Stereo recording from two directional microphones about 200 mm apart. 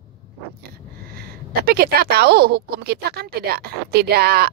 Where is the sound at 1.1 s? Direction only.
50° right (ahead or behind).